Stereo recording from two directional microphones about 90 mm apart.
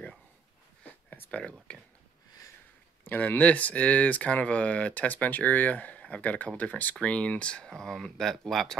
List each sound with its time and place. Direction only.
0.8 s a sound: 20° left (ahead or behind)
1.4 s speech: 10° left (ahead or behind)
3.1 s speech: 20° left (ahead or behind); by 8.7 s 5° left (ahead or behind)